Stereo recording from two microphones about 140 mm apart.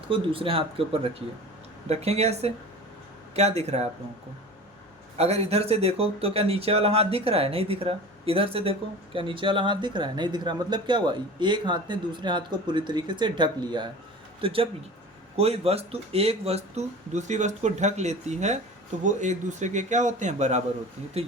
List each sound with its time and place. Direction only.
0.1 s speech: 40° right (ahead or behind)
5.1 s a man's voice: 50° right (ahead or behind)
21.2 s speech: 45° right (ahead or behind)